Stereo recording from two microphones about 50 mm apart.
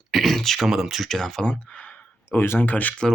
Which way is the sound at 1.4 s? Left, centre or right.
Left.